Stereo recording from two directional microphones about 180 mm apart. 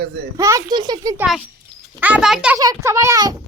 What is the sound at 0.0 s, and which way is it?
Speech, 65° right (ahead or behind).